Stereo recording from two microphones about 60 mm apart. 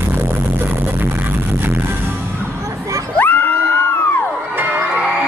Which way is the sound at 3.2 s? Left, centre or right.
Left.